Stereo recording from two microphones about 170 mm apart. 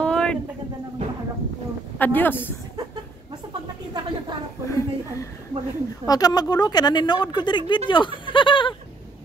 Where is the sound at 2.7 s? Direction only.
25° right (ahead or behind).